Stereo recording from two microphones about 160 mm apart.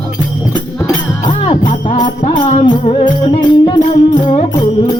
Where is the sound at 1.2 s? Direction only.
30° left (ahead or behind).